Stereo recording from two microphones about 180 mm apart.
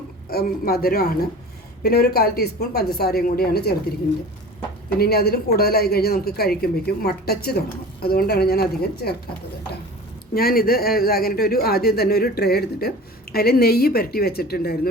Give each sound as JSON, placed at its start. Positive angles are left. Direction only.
{"t": 0.3, "sound": "a man's voice", "side_deg": 55}
{"t": 4.9, "sound": "a man's voice", "side_deg": 60}
{"t": 10.3, "sound": "a man's voice", "side_deg": 55}